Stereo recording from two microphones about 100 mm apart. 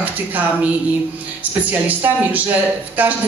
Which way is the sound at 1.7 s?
15° right (ahead or behind).